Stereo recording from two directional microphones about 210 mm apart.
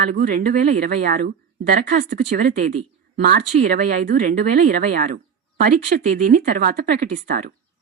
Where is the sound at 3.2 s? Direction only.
50° right (ahead or behind).